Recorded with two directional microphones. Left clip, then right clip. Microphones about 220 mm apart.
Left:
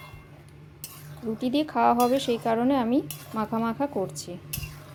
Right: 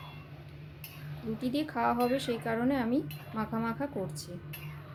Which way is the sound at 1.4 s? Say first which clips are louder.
Left 8 dB; 30° left (ahead or behind).